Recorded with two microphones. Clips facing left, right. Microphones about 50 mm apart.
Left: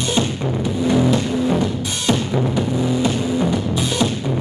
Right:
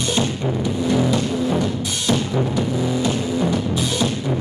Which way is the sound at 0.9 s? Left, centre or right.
Centre.